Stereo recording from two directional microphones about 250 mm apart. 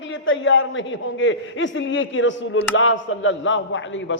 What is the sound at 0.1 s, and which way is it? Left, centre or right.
Speech, left.